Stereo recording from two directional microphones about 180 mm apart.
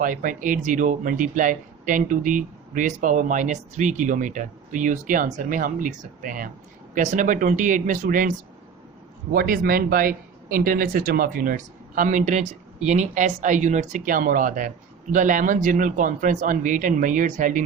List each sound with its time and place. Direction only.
0.0 s speech: 50° right (ahead or behind)